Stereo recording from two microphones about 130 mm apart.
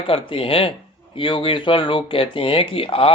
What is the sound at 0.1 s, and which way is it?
Speech, 45° left (ahead or behind).